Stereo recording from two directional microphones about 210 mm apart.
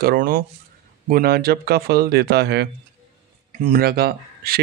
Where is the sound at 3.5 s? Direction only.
40° right (ahead or behind).